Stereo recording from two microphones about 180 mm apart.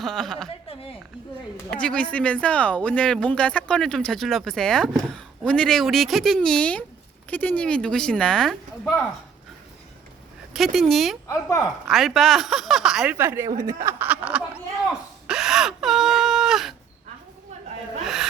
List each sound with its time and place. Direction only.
0.0 s speech: centre (ahead or behind)
1.7 s speech: 5° left (ahead or behind)
10.5 s speech: centre (ahead or behind)
11.3 s speech: 15° left (ahead or behind)
11.9 s speech: centre (ahead or behind)
15.3 s wail: 5° right (ahead or behind)
18.0 s a sound: centre (ahead or behind)